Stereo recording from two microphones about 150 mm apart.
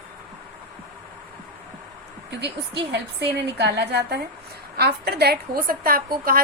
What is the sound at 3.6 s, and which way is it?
A woman's voice, 90° right.